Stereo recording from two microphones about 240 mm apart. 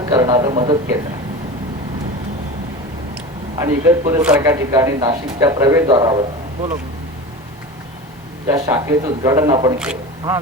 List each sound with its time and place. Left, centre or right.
0.1 s speech: centre
3.6 s speech: centre
8.4 s speech: centre
9.7 s speech: centre